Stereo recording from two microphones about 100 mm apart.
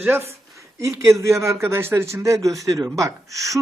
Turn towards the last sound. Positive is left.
turn(degrees=-30)  # may be behind; listen again after turning